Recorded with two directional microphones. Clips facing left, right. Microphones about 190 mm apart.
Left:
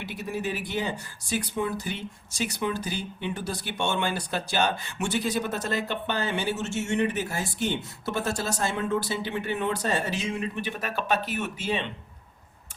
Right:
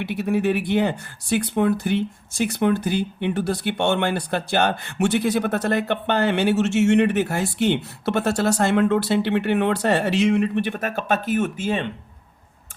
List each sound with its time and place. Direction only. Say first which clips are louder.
0.0 s speech: right 10 dB; 65° right (ahead or behind)